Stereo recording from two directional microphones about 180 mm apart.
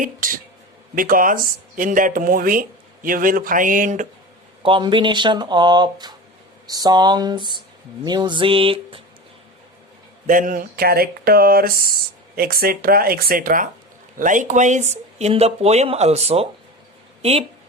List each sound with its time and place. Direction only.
0.2 s speech: 50° right (ahead or behind)
4.6 s speech: 30° right (ahead or behind)
10.2 s speech: 50° right (ahead or behind)